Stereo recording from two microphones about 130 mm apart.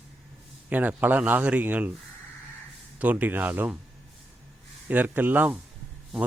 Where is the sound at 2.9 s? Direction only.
10° right (ahead or behind).